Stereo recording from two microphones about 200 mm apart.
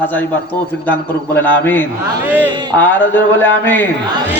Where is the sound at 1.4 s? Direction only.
10° left (ahead or behind).